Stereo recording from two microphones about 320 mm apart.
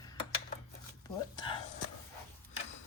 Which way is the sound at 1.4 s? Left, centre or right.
Centre.